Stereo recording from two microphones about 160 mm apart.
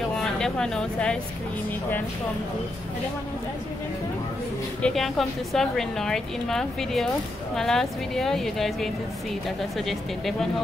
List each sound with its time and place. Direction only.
0.1 s speech: 5° left (ahead or behind)
4.8 s a woman's voice: centre (ahead or behind)